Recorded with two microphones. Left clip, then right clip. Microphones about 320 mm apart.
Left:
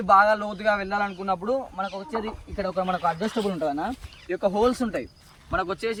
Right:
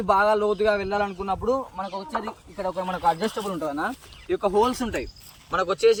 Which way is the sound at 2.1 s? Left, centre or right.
Right.